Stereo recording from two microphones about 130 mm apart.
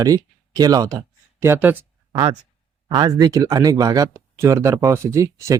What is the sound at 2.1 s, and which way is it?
Speech, 30° right (ahead or behind).